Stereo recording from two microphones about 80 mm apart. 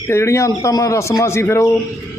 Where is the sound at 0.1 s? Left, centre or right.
Left.